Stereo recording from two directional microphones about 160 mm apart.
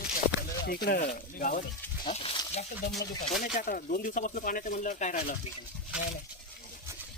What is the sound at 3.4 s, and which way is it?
Speech, 60° left (ahead or behind).